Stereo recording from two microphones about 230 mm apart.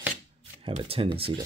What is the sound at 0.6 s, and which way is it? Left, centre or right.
Speech, right.